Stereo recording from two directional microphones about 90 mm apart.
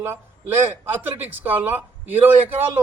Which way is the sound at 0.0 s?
25° right (ahead or behind).